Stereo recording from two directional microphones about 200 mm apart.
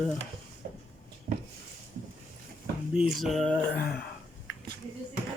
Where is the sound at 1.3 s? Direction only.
45° right (ahead or behind).